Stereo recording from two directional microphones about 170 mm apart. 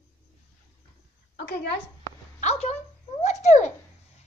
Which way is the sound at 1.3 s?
75° left (ahead or behind).